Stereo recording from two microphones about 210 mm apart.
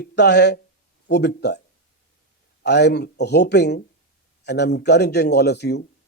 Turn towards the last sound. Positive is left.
turn(degrees=55)  # may be behind; listen again after turning